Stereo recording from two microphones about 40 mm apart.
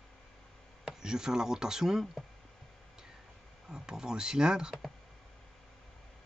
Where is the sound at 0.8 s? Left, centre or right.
Centre.